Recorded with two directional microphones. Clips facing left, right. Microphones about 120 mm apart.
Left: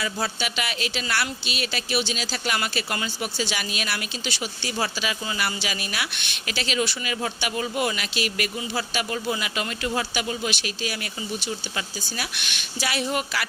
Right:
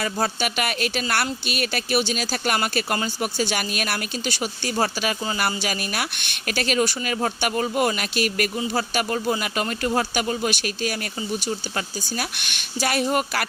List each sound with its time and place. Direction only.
0.0 s speech: 50° right (ahead or behind)
12.1 s speech: 45° right (ahead or behind)